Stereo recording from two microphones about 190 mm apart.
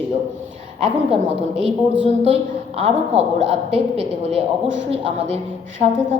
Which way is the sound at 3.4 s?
30° right (ahead or behind).